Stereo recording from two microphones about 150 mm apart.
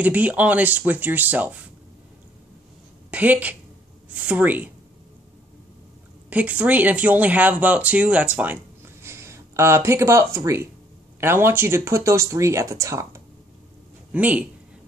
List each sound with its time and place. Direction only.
0.0 s speech: 10° right (ahead or behind)
3.1 s a woman's voice: 10° right (ahead or behind)
6.3 s speech: 10° right (ahead or behind)
14.1 s speech: 10° right (ahead or behind)